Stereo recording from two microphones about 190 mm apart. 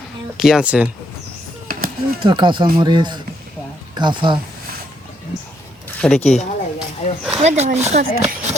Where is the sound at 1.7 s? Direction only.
50° right (ahead or behind).